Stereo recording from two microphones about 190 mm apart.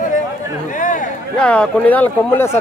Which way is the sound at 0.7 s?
45° left (ahead or behind).